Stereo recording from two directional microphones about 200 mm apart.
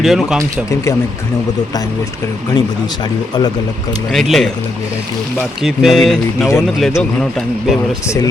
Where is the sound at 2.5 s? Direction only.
20° left (ahead or behind).